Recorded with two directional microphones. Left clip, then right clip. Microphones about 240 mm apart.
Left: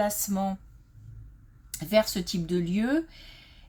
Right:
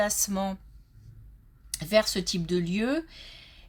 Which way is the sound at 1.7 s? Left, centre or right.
Right.